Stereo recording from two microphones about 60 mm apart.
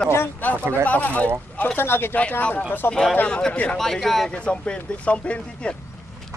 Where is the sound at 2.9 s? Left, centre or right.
Centre.